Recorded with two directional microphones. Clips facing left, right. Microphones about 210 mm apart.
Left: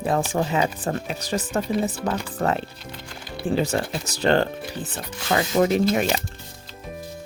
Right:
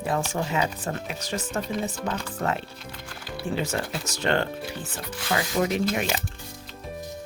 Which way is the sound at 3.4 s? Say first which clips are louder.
Left 5 dB; 35° left (ahead or behind).